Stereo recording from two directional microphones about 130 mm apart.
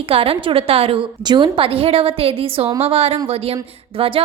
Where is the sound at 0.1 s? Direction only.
45° right (ahead or behind).